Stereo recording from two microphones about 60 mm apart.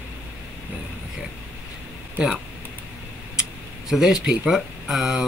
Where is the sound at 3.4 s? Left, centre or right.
Centre.